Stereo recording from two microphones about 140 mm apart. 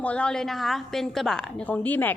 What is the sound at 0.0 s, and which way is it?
A woman's voice, 10° left (ahead or behind).